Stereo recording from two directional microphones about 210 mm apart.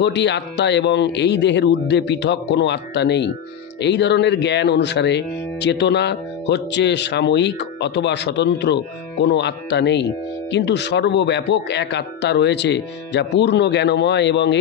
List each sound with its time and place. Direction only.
0.0 s speech: 55° left (ahead or behind)